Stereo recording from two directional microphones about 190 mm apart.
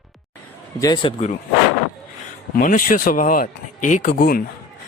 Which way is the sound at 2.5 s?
45° left (ahead or behind).